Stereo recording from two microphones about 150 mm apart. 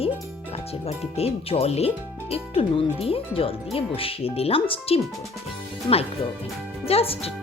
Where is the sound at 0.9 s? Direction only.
40° left (ahead or behind).